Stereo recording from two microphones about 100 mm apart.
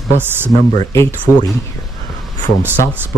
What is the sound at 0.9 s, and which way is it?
Speech, 30° left (ahead or behind).